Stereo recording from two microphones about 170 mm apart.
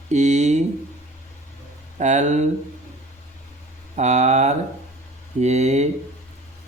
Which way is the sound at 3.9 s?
45° right (ahead or behind).